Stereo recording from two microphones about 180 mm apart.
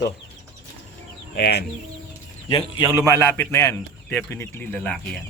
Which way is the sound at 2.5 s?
25° left (ahead or behind).